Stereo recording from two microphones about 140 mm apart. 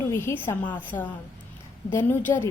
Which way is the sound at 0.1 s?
20° left (ahead or behind).